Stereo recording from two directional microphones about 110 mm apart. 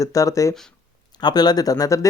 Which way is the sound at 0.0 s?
30° left (ahead or behind).